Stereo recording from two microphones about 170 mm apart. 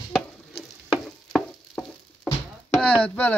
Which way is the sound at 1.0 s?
Centre (ahead or behind).